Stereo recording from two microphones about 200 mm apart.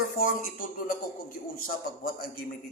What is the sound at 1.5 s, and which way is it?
Speech, 45° left (ahead or behind).